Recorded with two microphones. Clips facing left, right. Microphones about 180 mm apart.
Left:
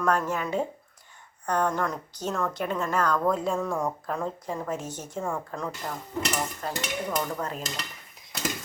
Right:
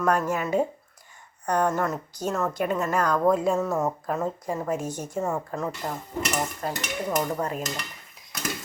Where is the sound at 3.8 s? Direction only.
20° right (ahead or behind).